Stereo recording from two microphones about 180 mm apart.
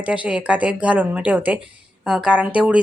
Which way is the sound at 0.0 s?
5° right (ahead or behind).